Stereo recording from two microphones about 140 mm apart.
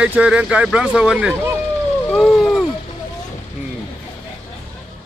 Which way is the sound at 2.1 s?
Centre (ahead or behind).